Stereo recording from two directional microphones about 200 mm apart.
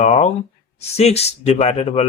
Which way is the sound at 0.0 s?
35° left (ahead or behind).